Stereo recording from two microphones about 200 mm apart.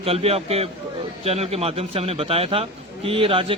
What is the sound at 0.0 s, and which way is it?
Speech, 30° right (ahead or behind).